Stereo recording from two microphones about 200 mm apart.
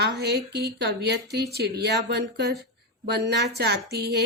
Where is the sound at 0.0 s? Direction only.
55° right (ahead or behind).